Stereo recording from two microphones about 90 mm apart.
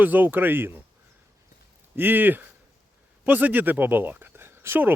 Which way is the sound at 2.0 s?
20° right (ahead or behind).